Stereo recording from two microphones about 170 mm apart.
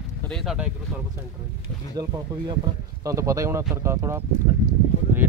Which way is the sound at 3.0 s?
20° right (ahead or behind).